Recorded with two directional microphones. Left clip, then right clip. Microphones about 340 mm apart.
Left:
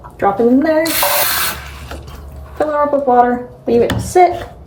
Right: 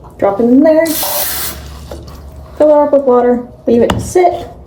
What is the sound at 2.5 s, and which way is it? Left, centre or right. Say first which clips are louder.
Speech: right 7 dB; centre.